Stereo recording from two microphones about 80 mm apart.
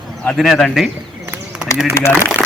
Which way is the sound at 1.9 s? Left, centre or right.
Left.